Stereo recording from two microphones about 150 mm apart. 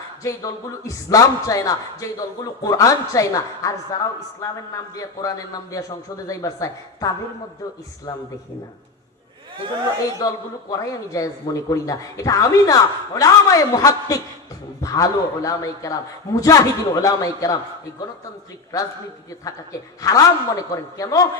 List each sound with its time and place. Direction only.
0.2 s a man's voice: 20° left (ahead or behind)
10.2 s a man's voice: 25° left (ahead or behind)
18.7 s a man's voice: 20° left (ahead or behind)
20.0 s a man's voice: 25° left (ahead or behind)